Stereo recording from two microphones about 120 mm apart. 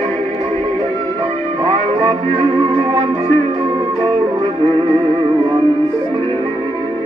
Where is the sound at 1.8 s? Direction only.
50° right (ahead or behind).